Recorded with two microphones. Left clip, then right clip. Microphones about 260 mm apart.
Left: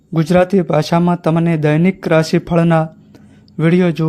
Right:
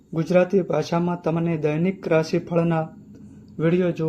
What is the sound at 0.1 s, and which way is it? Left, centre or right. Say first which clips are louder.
A man's voice: left 6 dB; left.